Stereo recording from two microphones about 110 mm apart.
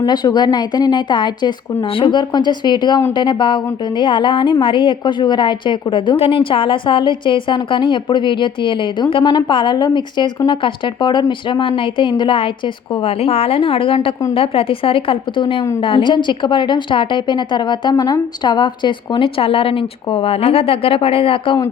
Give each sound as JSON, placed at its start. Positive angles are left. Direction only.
{"t": 0.0, "sound": "a woman's voice", "side_deg": 40}
{"t": 6.1, "sound": "a woman's voice", "side_deg": 60}
{"t": 13.1, "sound": "a woman's voice", "side_deg": 65}